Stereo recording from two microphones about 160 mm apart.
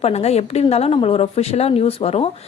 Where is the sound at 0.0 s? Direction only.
40° left (ahead or behind).